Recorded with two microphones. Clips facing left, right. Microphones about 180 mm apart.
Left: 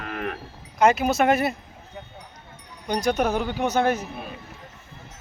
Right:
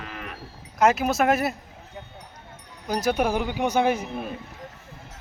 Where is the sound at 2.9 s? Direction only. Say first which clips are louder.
Left 1 dB; 5° right (ahead or behind).